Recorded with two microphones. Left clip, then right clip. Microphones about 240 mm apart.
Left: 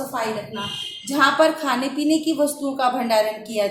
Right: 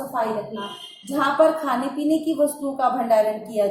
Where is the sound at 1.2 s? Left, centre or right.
Left.